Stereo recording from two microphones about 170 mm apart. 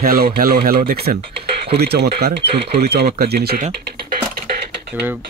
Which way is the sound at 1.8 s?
70° right (ahead or behind).